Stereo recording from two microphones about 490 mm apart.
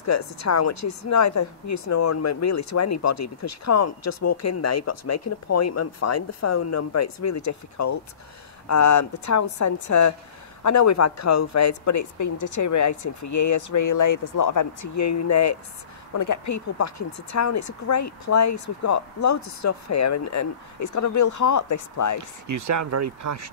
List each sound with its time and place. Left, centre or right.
0.0 s speech: left
22.5 s speech: right